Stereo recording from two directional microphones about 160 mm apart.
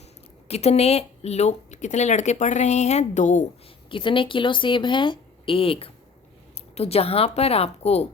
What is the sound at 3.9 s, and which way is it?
A woman's voice, 30° left (ahead or behind).